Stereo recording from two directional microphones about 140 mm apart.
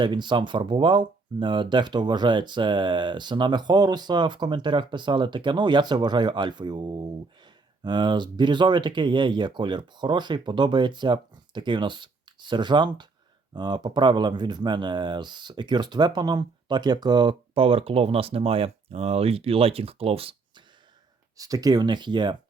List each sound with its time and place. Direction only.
0.0 s speech: 35° right (ahead or behind)
21.3 s speech: 25° right (ahead or behind)